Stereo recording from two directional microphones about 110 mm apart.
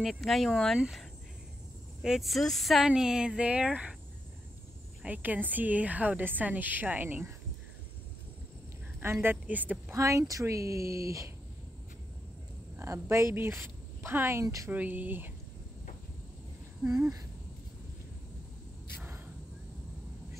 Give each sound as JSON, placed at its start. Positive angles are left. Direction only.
{"t": 0.0, "sound": "a woman's voice", "side_deg": 0}
{"t": 5.0, "sound": "a woman's voice", "side_deg": -15}
{"t": 9.0, "sound": "speech", "side_deg": -20}
{"t": 9.9, "sound": "speech", "side_deg": -30}
{"t": 12.7, "sound": "speech", "side_deg": -25}
{"t": 14.7, "sound": "a woman's voice", "side_deg": -15}
{"t": 16.8, "sound": "speech", "side_deg": -20}
{"t": 18.9, "sound": "a sound", "side_deg": -20}